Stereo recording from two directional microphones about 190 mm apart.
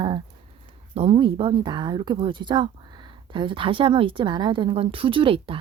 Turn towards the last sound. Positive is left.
turn(degrees=-30)  # may be behind; listen again after turning